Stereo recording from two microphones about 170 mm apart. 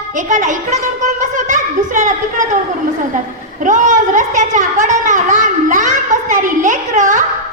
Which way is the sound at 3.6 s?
50° right (ahead or behind).